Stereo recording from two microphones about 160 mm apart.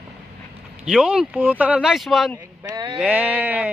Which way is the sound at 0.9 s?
5° right (ahead or behind).